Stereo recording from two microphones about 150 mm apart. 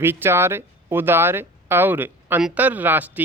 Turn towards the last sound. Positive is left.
turn(degrees=-10)  # may be behind; listen again after turning